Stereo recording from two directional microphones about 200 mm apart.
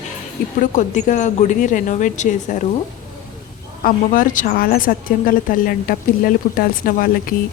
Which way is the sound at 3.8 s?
40° left (ahead or behind).